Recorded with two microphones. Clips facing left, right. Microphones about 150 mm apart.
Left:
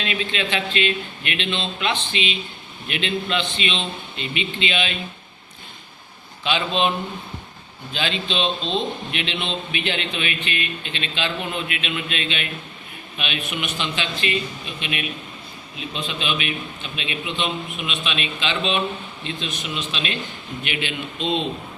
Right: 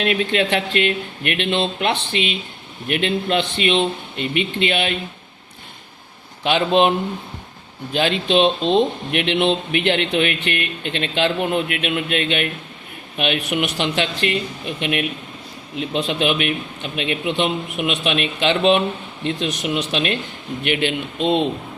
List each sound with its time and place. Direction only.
0.0 s speech: 60° right (ahead or behind)
6.4 s speech: 60° right (ahead or behind)
7.9 s speech: 55° right (ahead or behind)
15.8 s speech: 70° right (ahead or behind)